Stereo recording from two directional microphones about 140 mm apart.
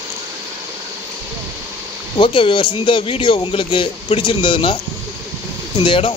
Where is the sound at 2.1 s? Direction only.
35° left (ahead or behind).